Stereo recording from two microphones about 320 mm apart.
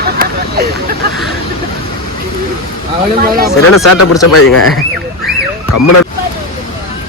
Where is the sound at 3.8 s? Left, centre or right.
Left.